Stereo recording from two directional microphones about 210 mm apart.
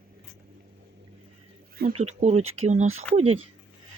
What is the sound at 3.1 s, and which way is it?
Speech, 5° left (ahead or behind).